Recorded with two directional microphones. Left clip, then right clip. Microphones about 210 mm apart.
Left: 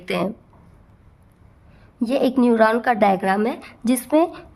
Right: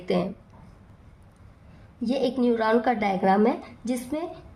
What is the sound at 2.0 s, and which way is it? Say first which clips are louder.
A woman's voice: left 6 dB; 35° left (ahead or behind).